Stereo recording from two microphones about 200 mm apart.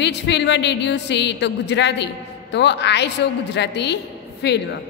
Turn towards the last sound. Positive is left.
turn(degrees=55)  # may be behind; listen again after turning